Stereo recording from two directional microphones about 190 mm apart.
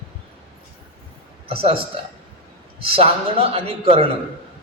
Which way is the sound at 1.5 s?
30° right (ahead or behind).